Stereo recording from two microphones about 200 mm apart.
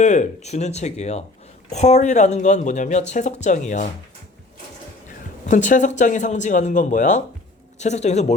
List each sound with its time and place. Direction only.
0.0 s speech: 35° left (ahead or behind)
5.5 s speech: 40° left (ahead or behind)